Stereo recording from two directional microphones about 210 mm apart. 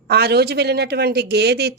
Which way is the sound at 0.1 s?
50° right (ahead or behind).